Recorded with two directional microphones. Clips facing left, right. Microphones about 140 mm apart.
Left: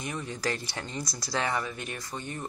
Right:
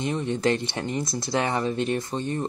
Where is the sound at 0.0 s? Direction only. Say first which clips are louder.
Right 9 dB; 25° right (ahead or behind).